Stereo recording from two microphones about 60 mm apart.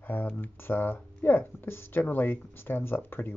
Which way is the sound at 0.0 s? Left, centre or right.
Left.